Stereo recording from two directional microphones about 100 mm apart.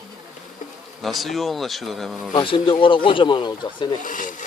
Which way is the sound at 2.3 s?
60° left (ahead or behind).